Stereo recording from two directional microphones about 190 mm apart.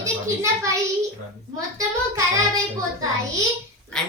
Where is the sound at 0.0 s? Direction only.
15° right (ahead or behind).